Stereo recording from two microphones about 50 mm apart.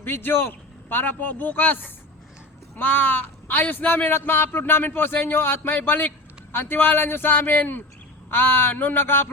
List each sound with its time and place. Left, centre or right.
0.0 s a man's voice: left